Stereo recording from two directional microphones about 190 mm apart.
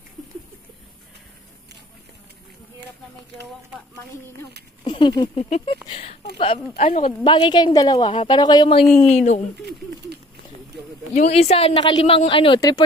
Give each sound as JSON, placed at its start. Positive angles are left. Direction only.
{"t": 4.8, "sound": "a woman's voice", "side_deg": 25}
{"t": 9.1, "sound": "speech", "side_deg": 40}
{"t": 11.1, "sound": "a woman's voice", "side_deg": 35}